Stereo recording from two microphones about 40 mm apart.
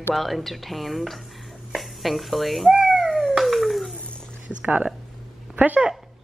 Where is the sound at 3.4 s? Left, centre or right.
Centre.